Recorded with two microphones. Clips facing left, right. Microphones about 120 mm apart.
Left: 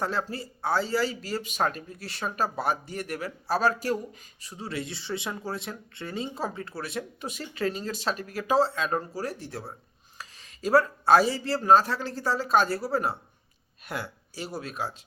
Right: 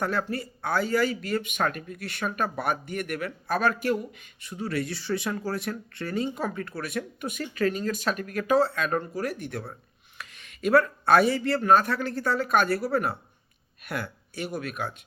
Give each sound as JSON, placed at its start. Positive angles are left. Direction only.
{"t": 0.0, "sound": "speech", "side_deg": 25}